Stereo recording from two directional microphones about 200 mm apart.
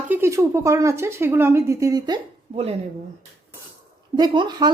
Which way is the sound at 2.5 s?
30° right (ahead or behind).